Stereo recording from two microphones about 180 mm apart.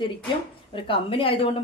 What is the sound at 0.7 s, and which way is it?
Speech, 30° left (ahead or behind).